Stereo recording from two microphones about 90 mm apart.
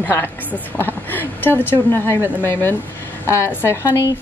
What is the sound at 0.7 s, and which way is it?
Speech, 25° left (ahead or behind).